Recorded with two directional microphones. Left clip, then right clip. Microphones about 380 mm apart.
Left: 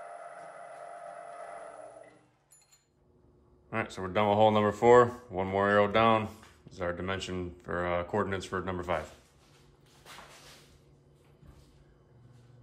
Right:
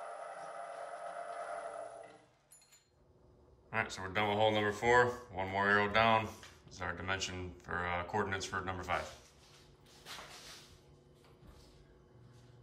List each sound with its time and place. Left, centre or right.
3.7 s speech: centre